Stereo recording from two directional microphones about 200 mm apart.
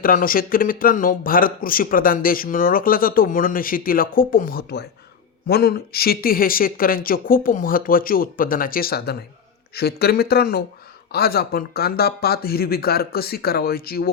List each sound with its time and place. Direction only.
0.0 s speech: 45° left (ahead or behind)